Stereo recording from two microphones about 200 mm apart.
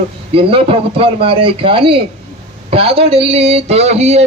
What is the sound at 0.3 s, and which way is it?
A man's voice, 25° right (ahead or behind).